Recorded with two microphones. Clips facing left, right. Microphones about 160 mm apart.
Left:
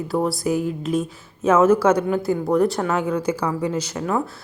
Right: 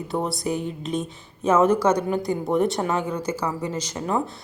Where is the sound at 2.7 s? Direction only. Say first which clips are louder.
Left 2 dB; 10° right (ahead or behind).